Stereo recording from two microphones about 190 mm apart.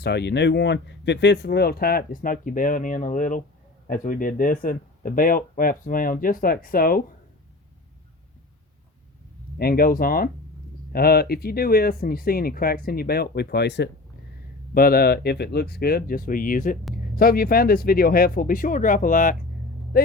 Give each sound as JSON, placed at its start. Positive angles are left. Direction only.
{"t": 0.0, "sound": "speech", "side_deg": 60}
{"t": 9.6, "sound": "speech", "side_deg": 50}
{"t": 14.7, "sound": "speech", "side_deg": 50}